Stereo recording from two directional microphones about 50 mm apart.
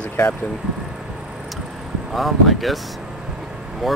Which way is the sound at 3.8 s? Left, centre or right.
Centre.